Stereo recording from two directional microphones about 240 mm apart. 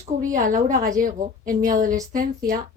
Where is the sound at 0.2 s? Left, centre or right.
Right.